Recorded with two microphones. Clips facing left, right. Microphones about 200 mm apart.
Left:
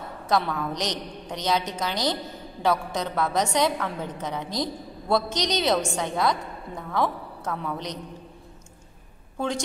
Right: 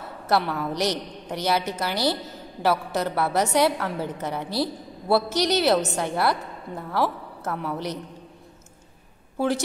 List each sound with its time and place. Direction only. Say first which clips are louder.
0.3 s a woman's voice: right 1 dB; 5° right (ahead or behind)
9.4 s a woman's voice: right 4 dB; 5° right (ahead or behind)